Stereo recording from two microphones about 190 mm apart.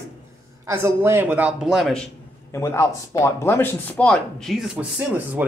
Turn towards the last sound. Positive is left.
turn(degrees=-5)  # may be behind; listen again after turning